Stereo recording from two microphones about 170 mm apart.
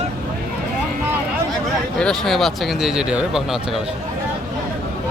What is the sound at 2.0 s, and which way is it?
Speech, 5° left (ahead or behind).